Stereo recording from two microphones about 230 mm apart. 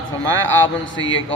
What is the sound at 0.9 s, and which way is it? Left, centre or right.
Speech, left.